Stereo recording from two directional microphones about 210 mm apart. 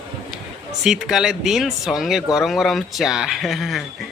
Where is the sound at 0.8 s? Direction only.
Centre (ahead or behind).